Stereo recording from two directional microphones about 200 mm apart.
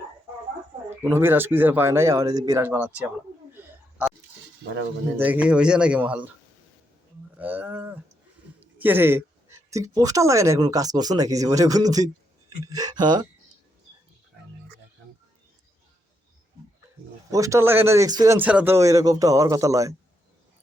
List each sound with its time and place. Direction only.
0.9 s speech: 10° right (ahead or behind)
3.5 s a sound: 10° right (ahead or behind)
5.1 s speech: 10° right (ahead or behind)
7.3 s speech: 10° right (ahead or behind)
17.3 s speech: 15° right (ahead or behind)